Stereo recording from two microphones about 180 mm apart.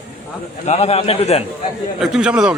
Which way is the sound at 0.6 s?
35° left (ahead or behind).